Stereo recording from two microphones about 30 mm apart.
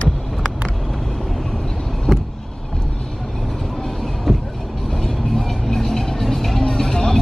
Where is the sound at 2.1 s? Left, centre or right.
Centre.